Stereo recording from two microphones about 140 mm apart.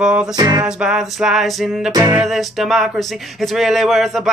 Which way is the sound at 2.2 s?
Centre (ahead or behind).